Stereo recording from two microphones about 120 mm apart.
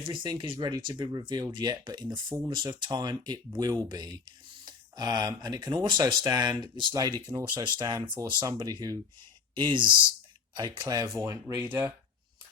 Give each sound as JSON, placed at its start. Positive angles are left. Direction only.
{"t": 0.1, "sound": "speech", "side_deg": -40}